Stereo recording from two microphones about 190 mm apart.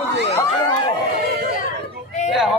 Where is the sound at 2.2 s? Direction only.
40° left (ahead or behind).